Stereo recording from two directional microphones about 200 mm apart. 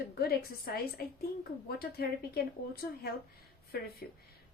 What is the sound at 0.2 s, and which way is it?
Speech, 50° left (ahead or behind).